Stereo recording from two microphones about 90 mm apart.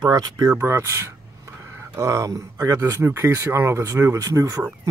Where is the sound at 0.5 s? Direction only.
30° right (ahead or behind).